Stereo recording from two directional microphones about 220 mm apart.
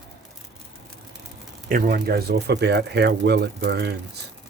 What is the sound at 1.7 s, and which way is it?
Speech, 40° right (ahead or behind).